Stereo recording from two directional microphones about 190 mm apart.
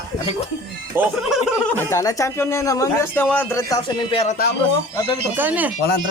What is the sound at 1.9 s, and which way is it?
Speech, 15° left (ahead or behind).